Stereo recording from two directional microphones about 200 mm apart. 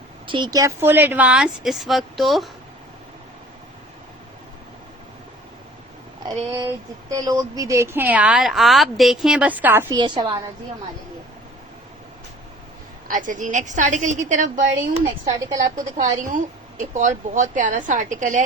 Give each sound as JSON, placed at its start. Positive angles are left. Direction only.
{"t": 0.3, "sound": "speech", "side_deg": -20}
{"t": 6.2, "sound": "speech", "side_deg": -15}
{"t": 13.1, "sound": "a woman's voice", "side_deg": -40}
{"t": 15.2, "sound": "speech", "side_deg": -15}
{"t": 16.0, "sound": "a woman's voice", "side_deg": -40}